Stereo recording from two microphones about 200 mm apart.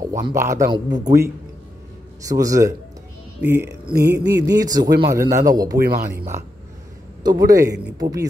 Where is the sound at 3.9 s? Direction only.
55° right (ahead or behind).